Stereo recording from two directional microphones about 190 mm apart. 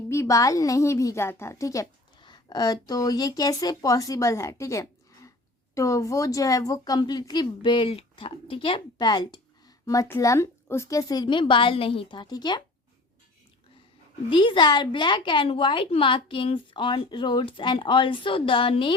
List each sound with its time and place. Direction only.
0.1 s a woman's voice: 15° left (ahead or behind)
14.3 s a woman's voice: 25° left (ahead or behind)